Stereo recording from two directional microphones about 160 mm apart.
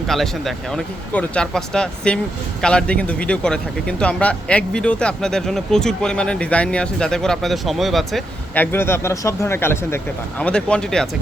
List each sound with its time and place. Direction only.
0.1 s speech: centre (ahead or behind)
8.5 s speech: 15° left (ahead or behind)